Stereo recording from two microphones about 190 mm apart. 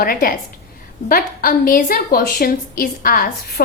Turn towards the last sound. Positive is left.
turn(degrees=50)  # may be behind; listen again after turning